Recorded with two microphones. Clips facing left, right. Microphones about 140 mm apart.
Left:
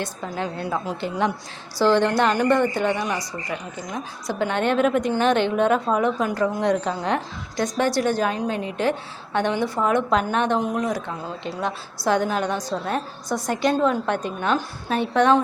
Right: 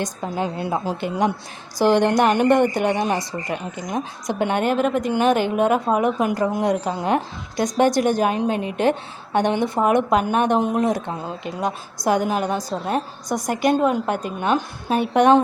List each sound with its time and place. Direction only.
0.0 s a woman's voice: 15° right (ahead or behind)
10.6 s a woman's voice: 25° right (ahead or behind)